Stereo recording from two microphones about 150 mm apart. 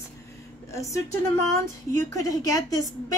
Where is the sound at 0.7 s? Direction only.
20° left (ahead or behind).